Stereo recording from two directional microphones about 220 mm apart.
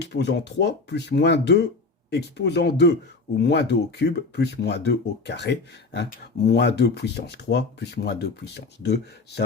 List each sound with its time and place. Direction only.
0.0 s speech: 50° left (ahead or behind)